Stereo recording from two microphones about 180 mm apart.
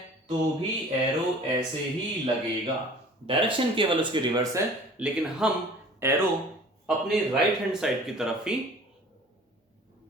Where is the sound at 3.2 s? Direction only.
30° right (ahead or behind).